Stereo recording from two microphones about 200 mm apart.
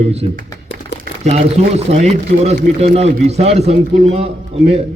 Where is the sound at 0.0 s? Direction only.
30° right (ahead or behind).